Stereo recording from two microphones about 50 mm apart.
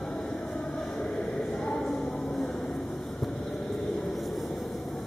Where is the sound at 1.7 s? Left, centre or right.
Centre.